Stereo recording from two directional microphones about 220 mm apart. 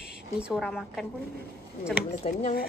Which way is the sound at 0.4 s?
5° right (ahead or behind).